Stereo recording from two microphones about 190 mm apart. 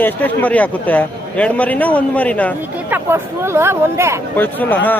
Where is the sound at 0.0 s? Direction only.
10° left (ahead or behind).